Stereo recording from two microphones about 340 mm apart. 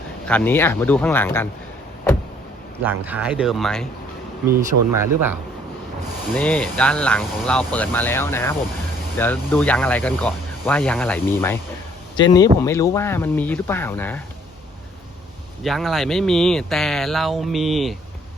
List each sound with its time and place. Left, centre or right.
0.3 s speech: centre
2.8 s speech: centre
6.3 s speech: centre
15.6 s speech: centre